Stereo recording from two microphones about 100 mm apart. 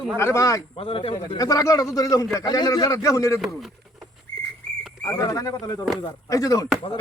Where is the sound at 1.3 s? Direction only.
35° left (ahead or behind).